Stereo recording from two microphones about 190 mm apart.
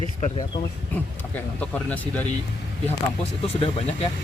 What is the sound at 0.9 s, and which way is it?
Speech, 10° left (ahead or behind).